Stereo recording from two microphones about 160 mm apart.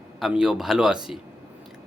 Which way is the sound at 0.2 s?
5° right (ahead or behind).